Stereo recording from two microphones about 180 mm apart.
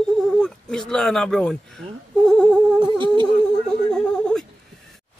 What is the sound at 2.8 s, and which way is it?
Humming, 30° right (ahead or behind).